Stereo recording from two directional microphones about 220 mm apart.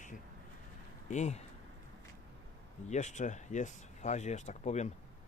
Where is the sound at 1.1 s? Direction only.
30° left (ahead or behind).